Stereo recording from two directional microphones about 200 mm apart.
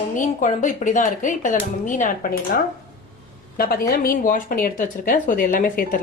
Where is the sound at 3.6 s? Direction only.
50° left (ahead or behind).